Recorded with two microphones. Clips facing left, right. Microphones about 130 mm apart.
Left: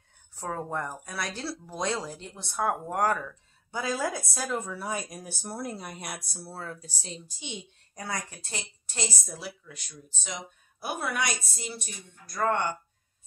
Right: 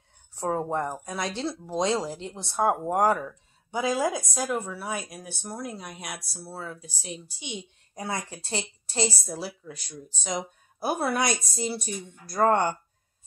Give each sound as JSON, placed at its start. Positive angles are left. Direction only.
{"t": 0.4, "sound": "speech", "side_deg": -25}
{"t": 6.8, "sound": "a woman's voice", "side_deg": -15}